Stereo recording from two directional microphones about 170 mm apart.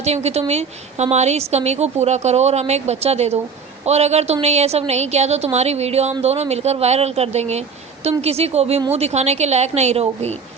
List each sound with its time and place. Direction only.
0.0 s a woman's voice: 40° right (ahead or behind)